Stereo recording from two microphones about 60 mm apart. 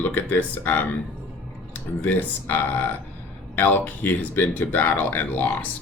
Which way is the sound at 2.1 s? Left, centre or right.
Left.